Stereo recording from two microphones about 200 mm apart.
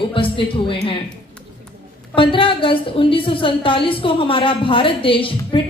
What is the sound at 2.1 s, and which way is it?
A woman's voice, 25° left (ahead or behind).